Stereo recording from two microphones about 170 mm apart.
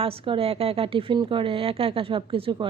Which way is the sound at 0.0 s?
35° right (ahead or behind).